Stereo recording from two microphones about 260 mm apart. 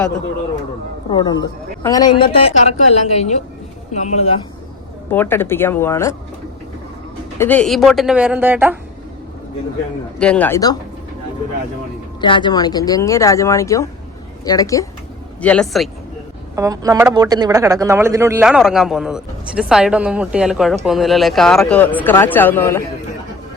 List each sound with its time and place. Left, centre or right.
1.1 s a woman's voice: centre
5.1 s speech: centre
7.3 s speech: centre
10.2 s speech: centre
12.2 s speech: centre
16.6 s speech: centre